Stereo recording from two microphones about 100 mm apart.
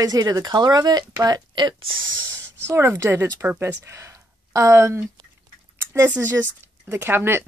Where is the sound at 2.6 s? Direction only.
25° right (ahead or behind).